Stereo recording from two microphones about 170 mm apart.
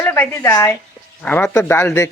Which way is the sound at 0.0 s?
10° left (ahead or behind).